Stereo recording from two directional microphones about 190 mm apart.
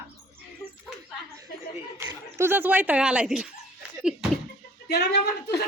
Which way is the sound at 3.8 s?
5° right (ahead or behind).